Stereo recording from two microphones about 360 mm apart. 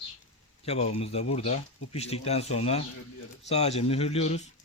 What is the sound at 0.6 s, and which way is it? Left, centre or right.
A man's voice, centre.